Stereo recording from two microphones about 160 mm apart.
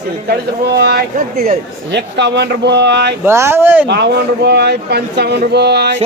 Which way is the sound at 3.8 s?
90° right.